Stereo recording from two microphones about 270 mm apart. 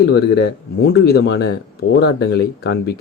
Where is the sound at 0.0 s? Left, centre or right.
Left.